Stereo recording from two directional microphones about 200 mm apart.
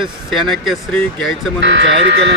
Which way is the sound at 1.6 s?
65° right (ahead or behind).